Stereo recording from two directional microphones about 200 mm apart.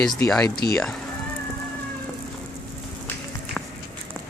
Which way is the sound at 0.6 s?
60° left (ahead or behind).